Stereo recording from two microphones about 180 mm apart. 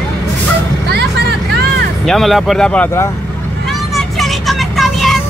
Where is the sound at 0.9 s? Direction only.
65° right (ahead or behind).